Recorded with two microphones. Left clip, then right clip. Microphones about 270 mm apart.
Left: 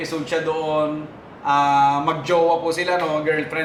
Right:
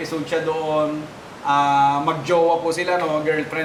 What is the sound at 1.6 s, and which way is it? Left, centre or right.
A man's voice, centre.